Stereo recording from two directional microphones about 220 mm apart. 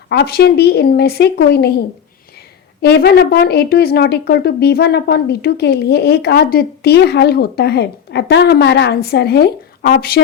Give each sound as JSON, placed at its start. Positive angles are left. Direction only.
{"t": 0.1, "sound": "speech", "side_deg": 45}
{"t": 2.8, "sound": "speech", "side_deg": 45}